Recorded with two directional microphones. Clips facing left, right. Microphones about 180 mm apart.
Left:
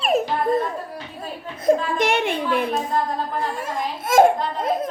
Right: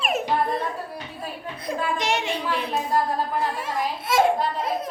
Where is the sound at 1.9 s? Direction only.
55° left (ahead or behind).